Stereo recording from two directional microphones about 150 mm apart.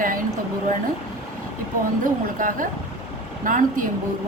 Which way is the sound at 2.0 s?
65° right (ahead or behind).